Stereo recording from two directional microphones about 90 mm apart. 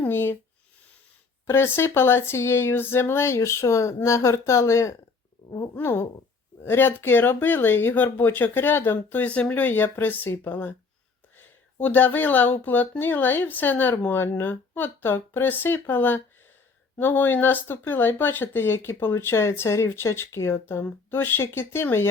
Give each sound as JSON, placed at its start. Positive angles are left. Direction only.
{"t": 0.0, "sound": "speech", "side_deg": 25}
{"t": 1.5, "sound": "speech", "side_deg": 30}
{"t": 5.5, "sound": "speech", "side_deg": 45}
{"t": 5.7, "sound": "speech", "side_deg": 25}